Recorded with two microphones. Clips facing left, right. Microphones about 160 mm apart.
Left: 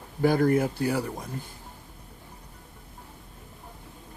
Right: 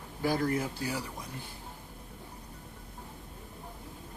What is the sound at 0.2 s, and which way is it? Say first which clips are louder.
Speech: left 8 dB; 50° left (ahead or behind).